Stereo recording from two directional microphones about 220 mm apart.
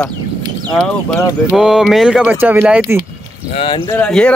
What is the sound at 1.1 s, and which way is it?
Speech, 10° left (ahead or behind).